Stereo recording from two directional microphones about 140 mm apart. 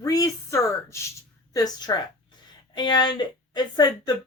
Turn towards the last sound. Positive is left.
turn(degrees=30)  # may be behind; listen again after turning